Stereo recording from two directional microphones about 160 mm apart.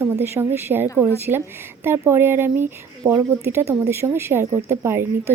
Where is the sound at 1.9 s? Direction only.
15° right (ahead or behind).